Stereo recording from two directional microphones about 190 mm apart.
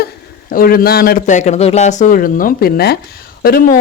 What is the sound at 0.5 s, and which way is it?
Speech, 50° left (ahead or behind).